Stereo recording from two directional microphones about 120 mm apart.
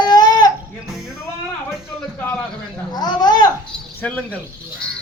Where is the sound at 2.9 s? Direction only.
35° left (ahead or behind).